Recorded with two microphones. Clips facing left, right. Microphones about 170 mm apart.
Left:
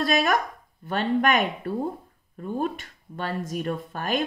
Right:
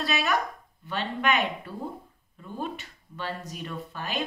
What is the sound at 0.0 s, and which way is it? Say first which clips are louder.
Speech: left 5 dB; 45° left (ahead or behind).